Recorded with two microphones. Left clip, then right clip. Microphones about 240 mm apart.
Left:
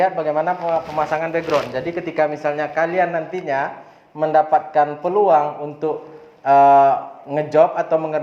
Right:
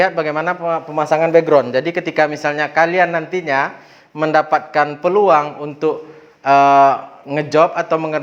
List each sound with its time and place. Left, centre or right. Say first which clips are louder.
0.0 s a man's voice: right 2 dB; right